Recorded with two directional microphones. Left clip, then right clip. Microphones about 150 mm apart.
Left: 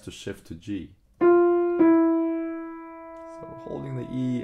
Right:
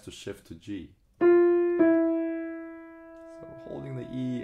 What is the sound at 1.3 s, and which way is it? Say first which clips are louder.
Keyboard: left 2 dB; 25° left (ahead or behind).